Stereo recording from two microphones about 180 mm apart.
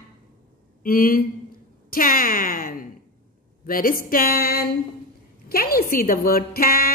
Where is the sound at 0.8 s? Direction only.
55° left (ahead or behind).